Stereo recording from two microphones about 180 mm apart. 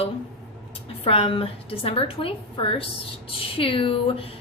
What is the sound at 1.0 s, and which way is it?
A woman's voice, 30° left (ahead or behind).